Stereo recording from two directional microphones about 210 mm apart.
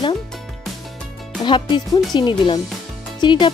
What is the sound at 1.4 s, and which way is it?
Speech, 20° left (ahead or behind).